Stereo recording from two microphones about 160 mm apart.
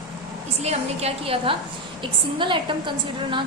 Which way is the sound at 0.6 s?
40° right (ahead or behind).